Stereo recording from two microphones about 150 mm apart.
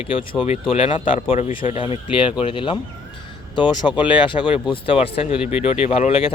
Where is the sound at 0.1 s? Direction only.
35° left (ahead or behind).